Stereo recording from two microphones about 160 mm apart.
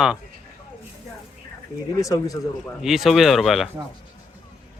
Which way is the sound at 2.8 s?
Centre (ahead or behind).